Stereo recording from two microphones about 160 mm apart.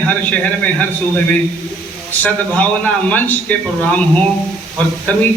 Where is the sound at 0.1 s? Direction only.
10° left (ahead or behind).